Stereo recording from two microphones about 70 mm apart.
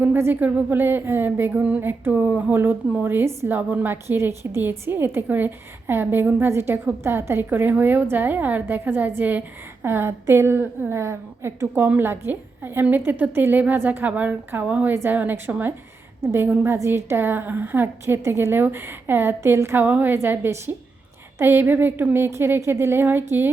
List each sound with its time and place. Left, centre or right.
0.0 s a woman's voice: right
18.0 s a woman's voice: right